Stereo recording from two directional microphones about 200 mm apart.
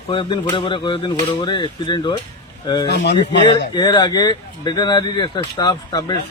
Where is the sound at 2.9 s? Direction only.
60° left (ahead or behind).